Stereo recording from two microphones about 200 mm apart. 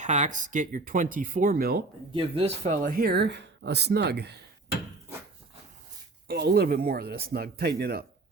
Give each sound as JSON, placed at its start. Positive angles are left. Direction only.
{"t": 0.0, "sound": "speech", "side_deg": -35}
{"t": 2.1, "sound": "speech", "side_deg": -30}
{"t": 6.2, "sound": "speech", "side_deg": -50}